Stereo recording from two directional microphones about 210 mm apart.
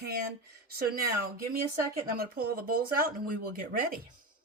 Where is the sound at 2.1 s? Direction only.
45° right (ahead or behind).